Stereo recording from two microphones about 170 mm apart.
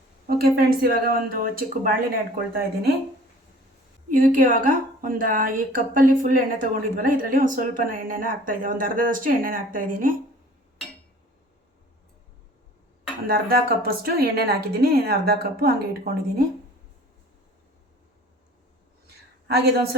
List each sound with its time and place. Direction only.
0.3 s a woman's voice: 65° right (ahead or behind)
4.1 s a woman's voice: 55° right (ahead or behind)
13.2 s a woman's voice: 60° right (ahead or behind)
19.5 s a woman's voice: 70° right (ahead or behind)